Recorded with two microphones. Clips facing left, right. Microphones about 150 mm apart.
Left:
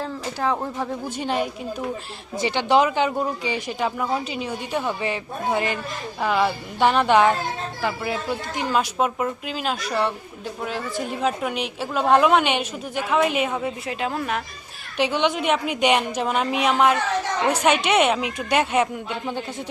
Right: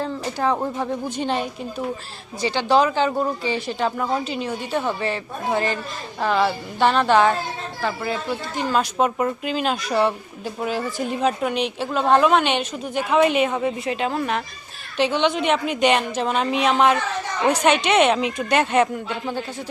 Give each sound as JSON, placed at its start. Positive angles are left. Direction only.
{"t": 0.0, "sound": "speech", "side_deg": 0}
{"t": 1.1, "sound": "speech", "side_deg": 10}
{"t": 2.4, "sound": "a woman's voice", "side_deg": 20}